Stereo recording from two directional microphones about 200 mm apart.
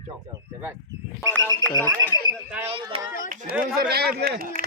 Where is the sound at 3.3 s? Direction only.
45° right (ahead or behind).